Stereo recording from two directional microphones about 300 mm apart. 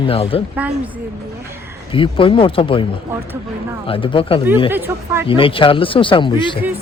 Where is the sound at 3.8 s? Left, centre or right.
Centre.